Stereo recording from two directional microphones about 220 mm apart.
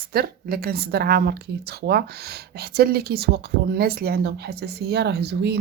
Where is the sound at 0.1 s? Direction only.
45° right (ahead or behind).